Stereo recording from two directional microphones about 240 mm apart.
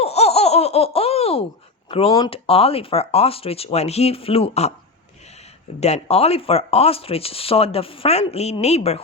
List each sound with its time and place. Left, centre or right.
0.0 s laughter: left
1.9 s speech: left
5.8 s speech: left